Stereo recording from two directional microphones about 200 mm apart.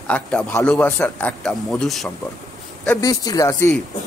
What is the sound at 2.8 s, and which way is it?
Speech, 15° left (ahead or behind).